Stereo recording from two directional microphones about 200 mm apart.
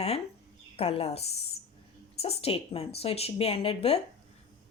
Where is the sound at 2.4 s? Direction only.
30° left (ahead or behind).